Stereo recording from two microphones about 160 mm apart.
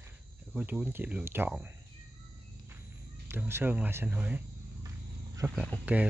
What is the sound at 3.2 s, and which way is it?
Speech, 15° right (ahead or behind).